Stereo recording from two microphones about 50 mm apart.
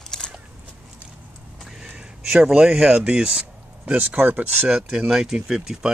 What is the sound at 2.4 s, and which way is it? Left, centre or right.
Speech, centre.